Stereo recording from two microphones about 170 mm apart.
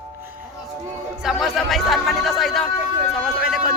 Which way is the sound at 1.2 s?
Centre (ahead or behind).